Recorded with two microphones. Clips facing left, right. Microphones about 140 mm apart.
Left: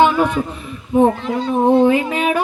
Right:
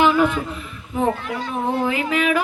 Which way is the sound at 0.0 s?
20° left (ahead or behind).